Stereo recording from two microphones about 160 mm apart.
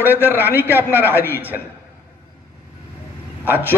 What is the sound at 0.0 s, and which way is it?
Speech, 10° right (ahead or behind).